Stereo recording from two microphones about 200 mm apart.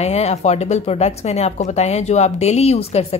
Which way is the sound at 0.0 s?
35° left (ahead or behind).